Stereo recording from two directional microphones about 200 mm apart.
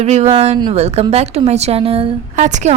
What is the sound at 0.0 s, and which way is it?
A woman's voice, 35° right (ahead or behind).